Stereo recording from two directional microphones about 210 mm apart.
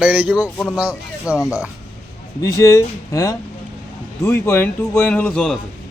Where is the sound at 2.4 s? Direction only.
15° left (ahead or behind).